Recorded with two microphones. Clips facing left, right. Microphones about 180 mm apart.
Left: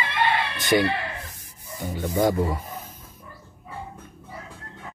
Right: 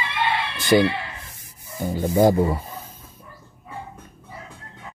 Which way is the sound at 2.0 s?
30° right (ahead or behind).